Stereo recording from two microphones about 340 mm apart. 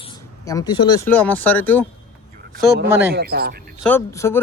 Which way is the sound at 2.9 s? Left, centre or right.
Centre.